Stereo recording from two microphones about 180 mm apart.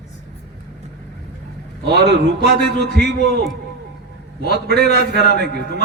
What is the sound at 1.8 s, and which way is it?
A man's voice, 60° right (ahead or behind).